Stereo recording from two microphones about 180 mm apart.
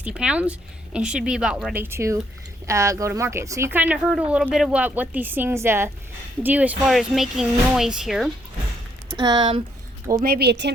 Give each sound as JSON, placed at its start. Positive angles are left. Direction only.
{"t": 0.0, "sound": "speech", "side_deg": -5}
{"t": 9.1, "sound": "speech", "side_deg": -25}
{"t": 10.2, "sound": "speech", "side_deg": -60}